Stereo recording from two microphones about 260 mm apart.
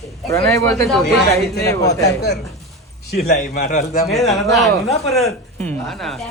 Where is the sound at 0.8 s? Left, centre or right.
Centre.